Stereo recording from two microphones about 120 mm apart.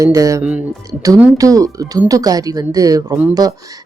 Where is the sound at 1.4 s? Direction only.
30° right (ahead or behind).